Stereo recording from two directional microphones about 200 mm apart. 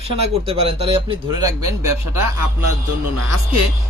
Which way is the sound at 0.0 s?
30° right (ahead or behind).